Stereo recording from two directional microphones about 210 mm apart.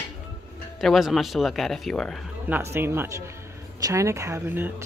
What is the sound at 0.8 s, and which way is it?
Speech, centre (ahead or behind).